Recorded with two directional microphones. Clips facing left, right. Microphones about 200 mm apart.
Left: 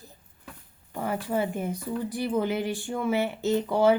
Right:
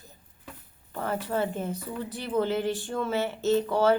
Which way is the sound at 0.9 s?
10° left (ahead or behind).